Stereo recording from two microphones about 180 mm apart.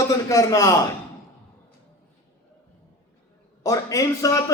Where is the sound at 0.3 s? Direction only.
15° left (ahead or behind).